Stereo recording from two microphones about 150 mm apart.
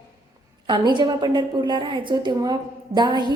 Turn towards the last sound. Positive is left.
turn(degrees=-30)  # may be behind; listen again after turning